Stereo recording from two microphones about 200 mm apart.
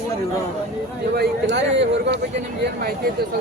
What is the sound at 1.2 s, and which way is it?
Speech, 60° right (ahead or behind).